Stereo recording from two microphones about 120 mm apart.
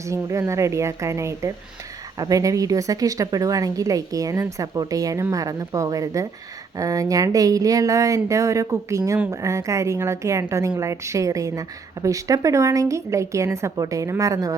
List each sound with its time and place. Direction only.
0.1 s a woman's voice: 25° right (ahead or behind)